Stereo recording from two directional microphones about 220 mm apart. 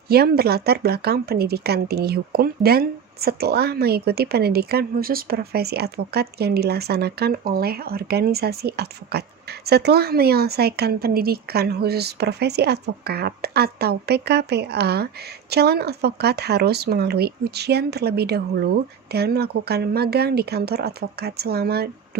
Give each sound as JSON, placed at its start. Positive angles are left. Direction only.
{"t": 0.1, "sound": "speech", "side_deg": -45}